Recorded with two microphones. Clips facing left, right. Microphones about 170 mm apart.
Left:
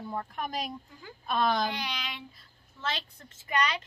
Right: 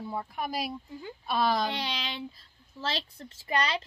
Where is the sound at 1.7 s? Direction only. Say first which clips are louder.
Right 2 dB; 30° right (ahead or behind).